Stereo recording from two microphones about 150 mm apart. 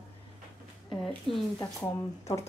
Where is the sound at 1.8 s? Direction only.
20° left (ahead or behind).